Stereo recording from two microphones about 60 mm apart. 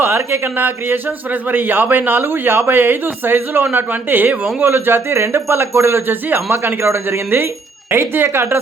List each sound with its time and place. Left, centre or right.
0.3 s a man's voice: right